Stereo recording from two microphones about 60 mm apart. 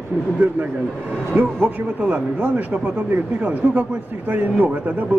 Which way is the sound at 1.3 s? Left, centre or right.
Right.